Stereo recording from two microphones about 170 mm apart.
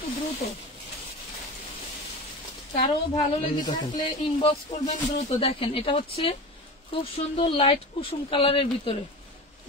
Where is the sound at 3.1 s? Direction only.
30° left (ahead or behind).